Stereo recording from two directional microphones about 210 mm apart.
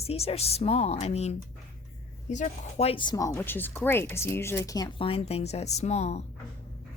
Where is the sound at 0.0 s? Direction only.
30° left (ahead or behind).